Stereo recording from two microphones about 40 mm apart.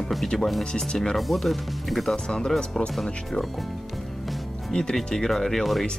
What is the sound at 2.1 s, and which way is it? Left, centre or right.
Speech, left.